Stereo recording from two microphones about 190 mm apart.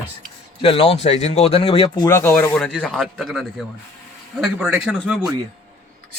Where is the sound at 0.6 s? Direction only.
30° left (ahead or behind).